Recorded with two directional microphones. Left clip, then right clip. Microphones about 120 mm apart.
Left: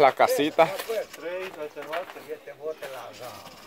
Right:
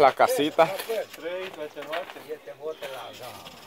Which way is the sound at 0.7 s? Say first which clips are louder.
Even; 75° left (ahead or behind).